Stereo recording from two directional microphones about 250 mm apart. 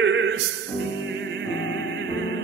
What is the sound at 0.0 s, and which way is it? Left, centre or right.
Music, right.